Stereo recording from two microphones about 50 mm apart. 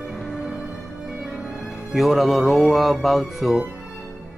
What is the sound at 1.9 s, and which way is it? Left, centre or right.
Speech, centre.